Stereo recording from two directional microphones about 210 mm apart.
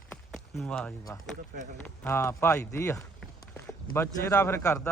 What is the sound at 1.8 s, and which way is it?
Speech, 10° left (ahead or behind).